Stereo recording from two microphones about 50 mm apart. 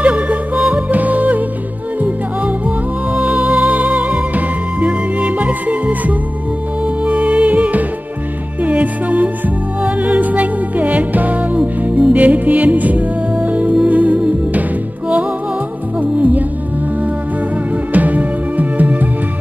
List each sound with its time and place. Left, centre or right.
0.0 s music: right
3.2 s music: right
16.0 s music: right
17.9 s music: right